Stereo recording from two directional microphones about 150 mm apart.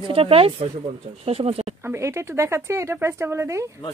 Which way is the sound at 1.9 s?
20° right (ahead or behind).